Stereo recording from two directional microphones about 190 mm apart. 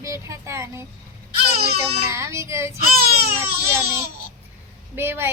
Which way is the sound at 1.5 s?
55° right (ahead or behind).